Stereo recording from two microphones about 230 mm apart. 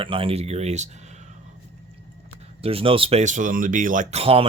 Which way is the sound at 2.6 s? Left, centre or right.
Right.